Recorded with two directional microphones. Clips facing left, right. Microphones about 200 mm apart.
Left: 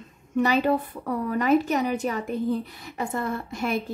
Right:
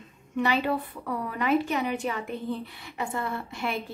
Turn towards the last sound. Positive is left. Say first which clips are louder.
# left 4 dB
turn(degrees=40)  # may be behind; listen again after turning